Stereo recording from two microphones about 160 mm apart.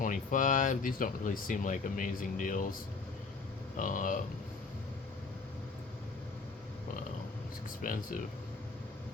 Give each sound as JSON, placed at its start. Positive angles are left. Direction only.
{"t": 0.0, "sound": "speech", "side_deg": 55}
{"t": 3.8, "sound": "speech", "side_deg": 55}
{"t": 7.8, "sound": "speech", "side_deg": 60}